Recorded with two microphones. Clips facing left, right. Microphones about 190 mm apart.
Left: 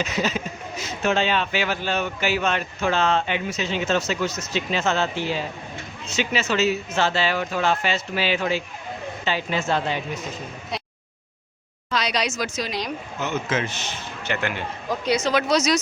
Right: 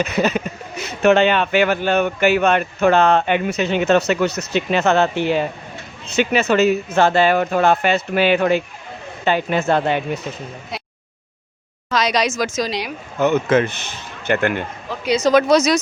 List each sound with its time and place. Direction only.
0.0 s speech: 60° right (ahead or behind)
11.9 s speech: 90° right
13.1 s speech: 55° right (ahead or behind)